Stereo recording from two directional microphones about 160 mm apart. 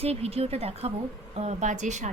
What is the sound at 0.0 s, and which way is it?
Speech, 40° right (ahead or behind).